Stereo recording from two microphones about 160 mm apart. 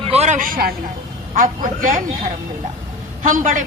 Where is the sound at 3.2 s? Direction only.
55° right (ahead or behind).